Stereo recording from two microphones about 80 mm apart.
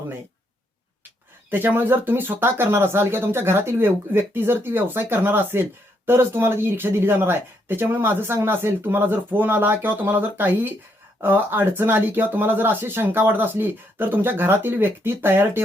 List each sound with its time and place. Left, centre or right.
1.5 s speech: right